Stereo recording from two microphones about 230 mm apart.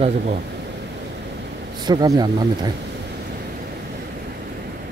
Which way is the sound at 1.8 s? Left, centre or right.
Centre.